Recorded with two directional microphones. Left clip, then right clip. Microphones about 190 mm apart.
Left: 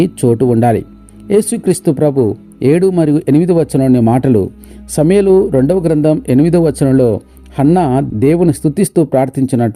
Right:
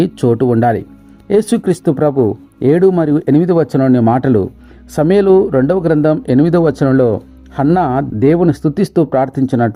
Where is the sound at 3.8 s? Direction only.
35° left (ahead or behind).